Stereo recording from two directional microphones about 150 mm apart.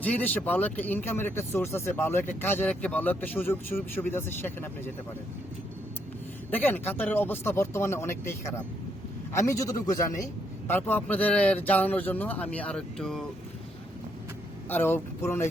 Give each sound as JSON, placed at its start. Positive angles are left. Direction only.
{"t": 0.0, "sound": "a man's voice", "side_deg": 10}
{"t": 6.5, "sound": "a man's voice", "side_deg": 10}
{"t": 14.7, "sound": "a man's voice", "side_deg": 15}